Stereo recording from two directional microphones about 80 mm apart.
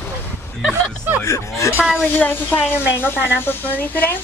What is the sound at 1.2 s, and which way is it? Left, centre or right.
Speech, left.